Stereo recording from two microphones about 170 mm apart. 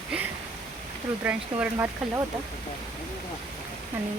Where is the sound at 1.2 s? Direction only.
10° right (ahead or behind).